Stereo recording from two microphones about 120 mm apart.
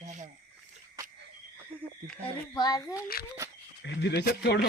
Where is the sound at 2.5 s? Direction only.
35° left (ahead or behind).